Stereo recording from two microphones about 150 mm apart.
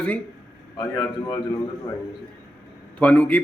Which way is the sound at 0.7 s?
30° left (ahead or behind).